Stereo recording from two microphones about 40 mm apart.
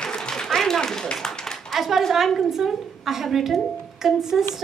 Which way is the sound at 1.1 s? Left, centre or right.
Centre.